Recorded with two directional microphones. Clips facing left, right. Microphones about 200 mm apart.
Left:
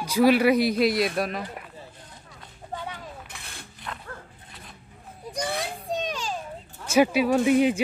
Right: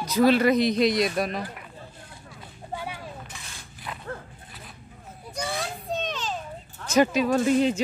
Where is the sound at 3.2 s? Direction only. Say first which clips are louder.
Even; 60° left (ahead or behind).